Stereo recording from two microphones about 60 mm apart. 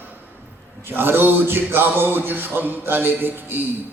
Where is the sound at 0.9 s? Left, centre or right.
Right.